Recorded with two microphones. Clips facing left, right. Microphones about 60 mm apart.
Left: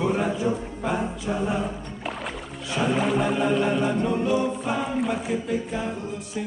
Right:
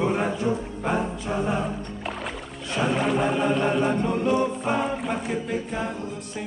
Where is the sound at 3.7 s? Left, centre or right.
Centre.